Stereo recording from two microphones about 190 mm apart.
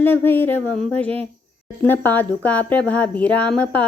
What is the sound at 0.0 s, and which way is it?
Speech, 10° left (ahead or behind).